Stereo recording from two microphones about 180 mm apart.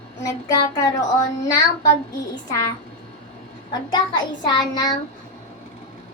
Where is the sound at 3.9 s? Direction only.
25° left (ahead or behind).